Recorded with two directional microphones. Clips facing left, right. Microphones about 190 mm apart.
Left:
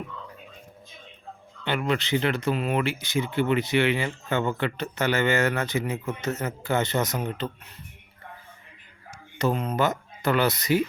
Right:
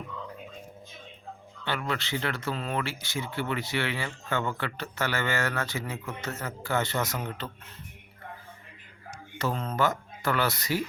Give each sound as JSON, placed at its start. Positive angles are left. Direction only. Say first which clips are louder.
{"t": 1.6, "sound": "speech", "louder": "left 6 dB", "side_deg": 20}
{"t": 9.4, "sound": "speech", "louder": "left 4 dB", "side_deg": 15}